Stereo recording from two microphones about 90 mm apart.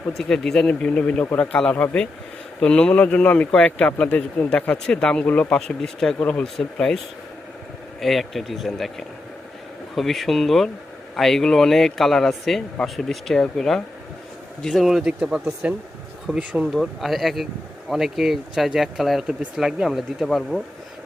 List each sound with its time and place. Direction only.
0.2 s a man's voice: 5° left (ahead or behind)
5.5 s speech: 5° left (ahead or behind)
8.0 s speech: centre (ahead or behind)
16.7 s speech: centre (ahead or behind)